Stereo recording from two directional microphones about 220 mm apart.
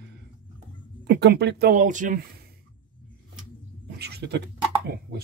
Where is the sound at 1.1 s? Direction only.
50° right (ahead or behind).